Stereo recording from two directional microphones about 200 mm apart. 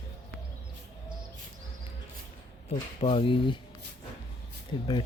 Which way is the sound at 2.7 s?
30° left (ahead or behind).